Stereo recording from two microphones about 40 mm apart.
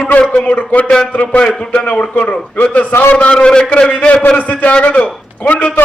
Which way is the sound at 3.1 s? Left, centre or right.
Left.